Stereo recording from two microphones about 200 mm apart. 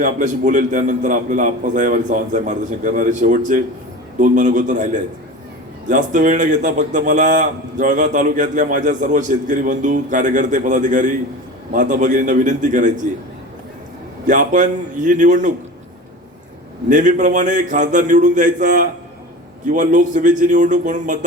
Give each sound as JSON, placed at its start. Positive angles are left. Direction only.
{"t": 0.0, "sound": "a man's voice", "side_deg": -40}
{"t": 14.3, "sound": "a man's voice", "side_deg": -40}
{"t": 16.9, "sound": "a man's voice", "side_deg": -40}